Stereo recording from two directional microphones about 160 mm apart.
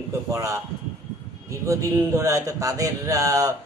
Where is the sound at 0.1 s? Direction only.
20° right (ahead or behind).